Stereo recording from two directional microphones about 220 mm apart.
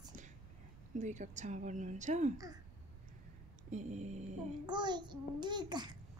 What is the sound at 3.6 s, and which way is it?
Speech, 35° right (ahead or behind).